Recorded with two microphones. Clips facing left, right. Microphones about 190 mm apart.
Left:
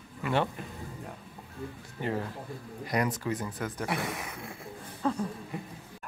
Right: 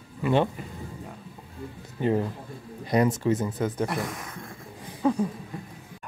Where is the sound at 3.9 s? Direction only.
Centre (ahead or behind).